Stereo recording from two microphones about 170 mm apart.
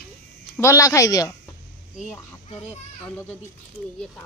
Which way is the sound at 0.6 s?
20° left (ahead or behind).